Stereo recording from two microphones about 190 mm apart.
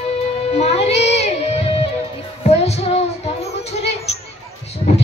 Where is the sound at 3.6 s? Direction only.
35° left (ahead or behind).